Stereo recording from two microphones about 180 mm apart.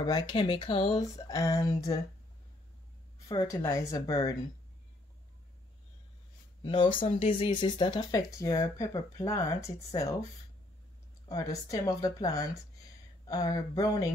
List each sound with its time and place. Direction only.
0.0 s speech: 25° left (ahead or behind)
3.3 s a woman's voice: 25° left (ahead or behind)
6.6 s speech: 30° left (ahead or behind)
11.2 s speech: 20° left (ahead or behind)